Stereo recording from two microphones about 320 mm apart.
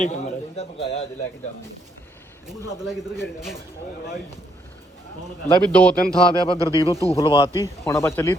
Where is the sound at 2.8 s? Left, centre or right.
Centre.